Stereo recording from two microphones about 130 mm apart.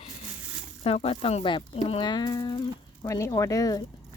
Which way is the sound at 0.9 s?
50° left (ahead or behind).